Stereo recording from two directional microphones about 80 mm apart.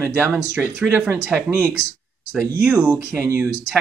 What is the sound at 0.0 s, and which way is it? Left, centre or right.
Speech, right.